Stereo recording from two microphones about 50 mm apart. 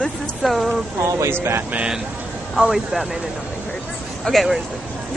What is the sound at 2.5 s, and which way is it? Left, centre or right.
Speech, centre.